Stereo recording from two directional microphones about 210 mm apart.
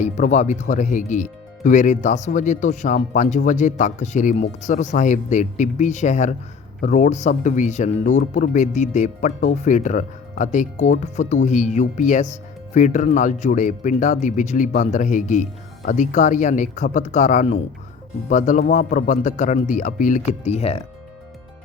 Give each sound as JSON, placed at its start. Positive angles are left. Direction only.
{"t": 0.0, "sound": "speech", "side_deg": 35}